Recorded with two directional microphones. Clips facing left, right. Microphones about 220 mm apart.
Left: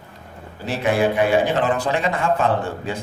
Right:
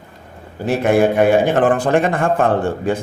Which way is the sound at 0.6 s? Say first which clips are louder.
Right 5 dB; 50° right (ahead or behind).